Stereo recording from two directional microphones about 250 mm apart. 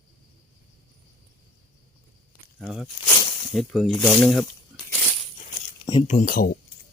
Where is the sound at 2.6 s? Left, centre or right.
Centre.